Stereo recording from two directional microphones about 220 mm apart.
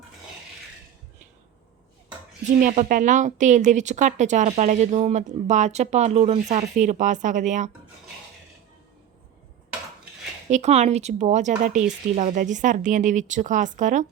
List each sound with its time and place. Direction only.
2.6 s a woman's voice: 35° right (ahead or behind)
10.5 s a woman's voice: 30° right (ahead or behind)